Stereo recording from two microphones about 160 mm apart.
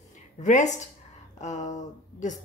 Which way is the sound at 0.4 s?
50° left (ahead or behind).